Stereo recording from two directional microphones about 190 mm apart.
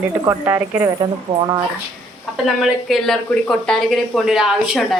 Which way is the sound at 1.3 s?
25° right (ahead or behind).